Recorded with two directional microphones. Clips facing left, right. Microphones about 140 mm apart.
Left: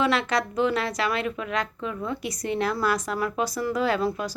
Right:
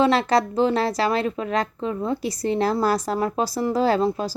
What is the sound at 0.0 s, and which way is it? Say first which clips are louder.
Speech: right 5 dB; 35° right (ahead or behind).